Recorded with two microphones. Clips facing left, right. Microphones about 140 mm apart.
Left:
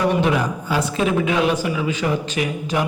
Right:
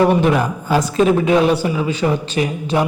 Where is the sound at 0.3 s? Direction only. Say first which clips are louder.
Right 4 dB; 40° right (ahead or behind).